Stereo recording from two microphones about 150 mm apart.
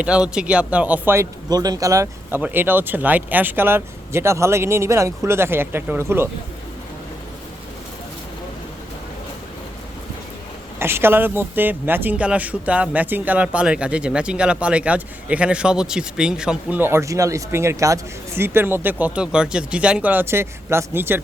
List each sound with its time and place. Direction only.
0.0 s a man's voice: 5° right (ahead or behind)
10.8 s a man's voice: 15° right (ahead or behind)